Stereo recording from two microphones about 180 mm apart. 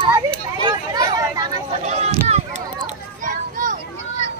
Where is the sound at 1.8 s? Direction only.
35° right (ahead or behind).